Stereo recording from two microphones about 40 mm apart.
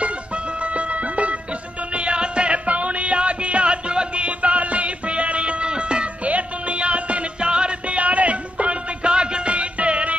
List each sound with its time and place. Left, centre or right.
0.7 s music: right